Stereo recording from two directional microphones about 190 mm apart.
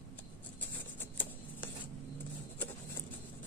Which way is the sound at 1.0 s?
10° left (ahead or behind).